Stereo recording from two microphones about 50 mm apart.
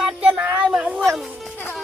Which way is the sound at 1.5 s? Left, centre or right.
Left.